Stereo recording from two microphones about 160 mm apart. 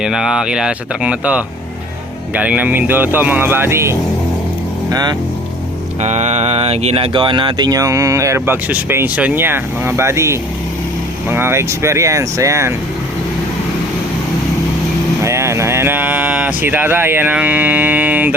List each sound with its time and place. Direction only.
0.0 s speech: 5° right (ahead or behind); by 5.1 s 25° right (ahead or behind)
6.0 s speech: 45° right (ahead or behind); by 12.7 s 20° right (ahead or behind)
15.2 s speech: 15° right (ahead or behind)